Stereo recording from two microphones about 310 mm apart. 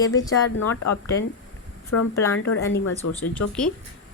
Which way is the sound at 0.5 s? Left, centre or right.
Left.